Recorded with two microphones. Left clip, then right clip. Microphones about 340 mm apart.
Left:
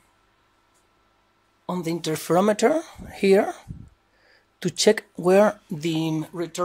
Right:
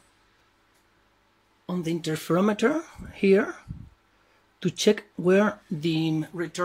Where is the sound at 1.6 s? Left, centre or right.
Centre.